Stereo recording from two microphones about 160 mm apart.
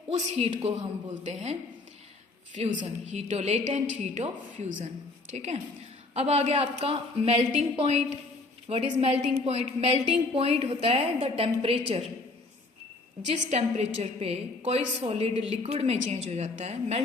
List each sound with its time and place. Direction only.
0.1 s a woman's voice: 40° right (ahead or behind)
2.6 s a woman's voice: 45° right (ahead or behind)
13.2 s a woman's voice: 45° right (ahead or behind)